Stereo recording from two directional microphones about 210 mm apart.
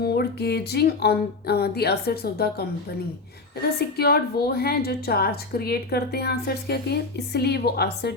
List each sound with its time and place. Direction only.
0.0 s a woman's voice: 50° left (ahead or behind)